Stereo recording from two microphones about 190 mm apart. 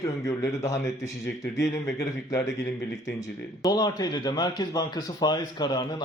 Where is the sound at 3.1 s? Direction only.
20° left (ahead or behind).